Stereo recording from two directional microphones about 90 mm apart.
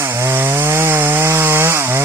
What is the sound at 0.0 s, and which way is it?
Chainsaw, 30° right (ahead or behind).